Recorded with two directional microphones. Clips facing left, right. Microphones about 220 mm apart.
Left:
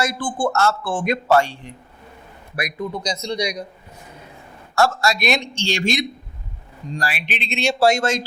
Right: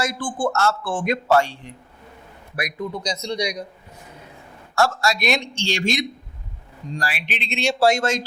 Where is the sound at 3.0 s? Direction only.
10° left (ahead or behind).